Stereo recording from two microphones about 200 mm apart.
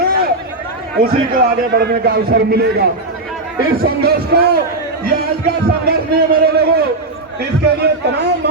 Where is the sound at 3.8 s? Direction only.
50° right (ahead or behind).